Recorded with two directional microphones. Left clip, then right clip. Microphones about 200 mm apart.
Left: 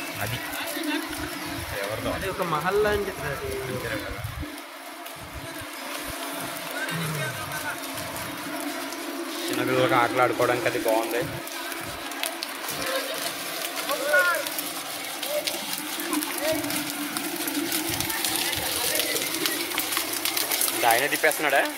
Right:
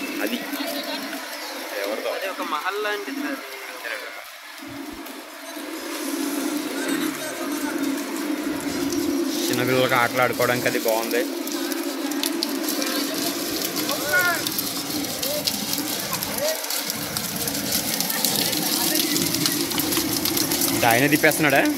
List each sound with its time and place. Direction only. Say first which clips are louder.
2.5 s speech: left 3 dB; 40° right (ahead or behind)
9.6 s speech: right 1 dB; centre (ahead or behind)
20.8 s speech: right 4 dB; 15° left (ahead or behind)